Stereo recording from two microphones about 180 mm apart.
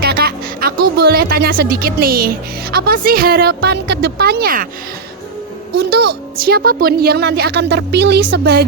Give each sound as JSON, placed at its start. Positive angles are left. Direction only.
{"t": 0.0, "sound": "music", "side_deg": -60}
{"t": 2.7, "sound": "a woman's voice", "side_deg": -55}
{"t": 5.7, "sound": "a woman's voice", "side_deg": -65}